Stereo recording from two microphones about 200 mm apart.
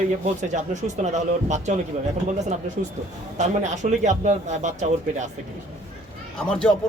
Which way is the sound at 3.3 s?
35° right (ahead or behind).